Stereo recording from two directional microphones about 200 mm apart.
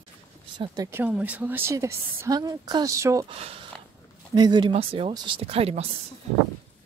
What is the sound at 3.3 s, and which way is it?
A woman's voice, 30° right (ahead or behind).